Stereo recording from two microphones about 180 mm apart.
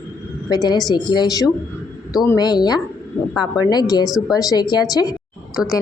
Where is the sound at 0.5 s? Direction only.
20° left (ahead or behind).